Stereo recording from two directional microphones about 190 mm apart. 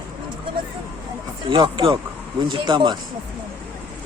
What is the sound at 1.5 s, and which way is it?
Speech, 25° right (ahead or behind).